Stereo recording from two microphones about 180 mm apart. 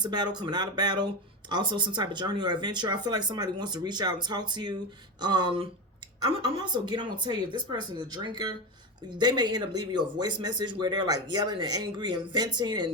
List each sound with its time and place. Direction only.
0.0 s speech: 25° right (ahead or behind)